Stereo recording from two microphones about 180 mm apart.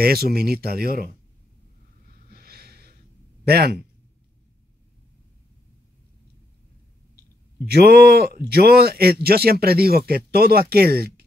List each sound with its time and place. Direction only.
0.0 s speech: 60° right (ahead or behind)
2.3 s a sound: 55° right (ahead or behind)
3.4 s speech: 60° right (ahead or behind)
7.6 s speech: 60° right (ahead or behind)